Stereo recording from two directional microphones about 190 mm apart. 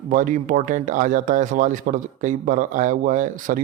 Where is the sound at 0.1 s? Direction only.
45° right (ahead or behind).